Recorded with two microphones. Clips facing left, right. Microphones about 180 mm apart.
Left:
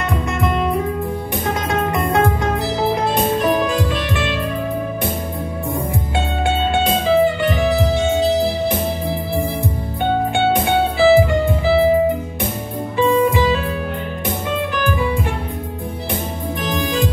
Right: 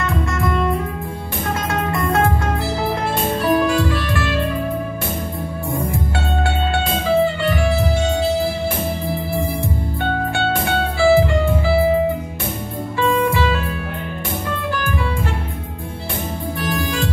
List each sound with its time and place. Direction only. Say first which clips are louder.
0.0 s music: left 1 dB; 20° left (ahead or behind)
1.7 s music: left 2 dB; 20° left (ahead or behind)
6.1 s music: left 4 dB; 20° left (ahead or behind)
10.3 s music: left 4 dB; 20° left (ahead or behind)
12.9 s music: left 3 dB; 15° left (ahead or behind)
16.6 s music: left 2 dB; 20° left (ahead or behind)